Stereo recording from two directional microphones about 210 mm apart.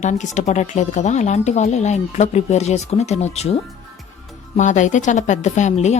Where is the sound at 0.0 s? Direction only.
35° left (ahead or behind).